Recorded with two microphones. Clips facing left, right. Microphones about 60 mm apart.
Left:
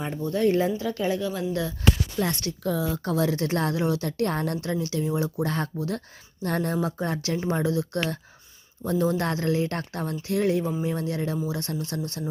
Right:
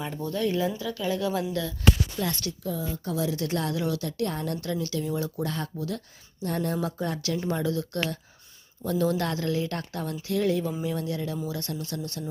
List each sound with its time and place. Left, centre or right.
0.3 s a woman's voice: left
1.2 s speech: centre
2.1 s a woman's voice: left
2.6 s speech: left
3.1 s a woman's voice: left
5.5 s a woman's voice: left
6.8 s a woman's voice: left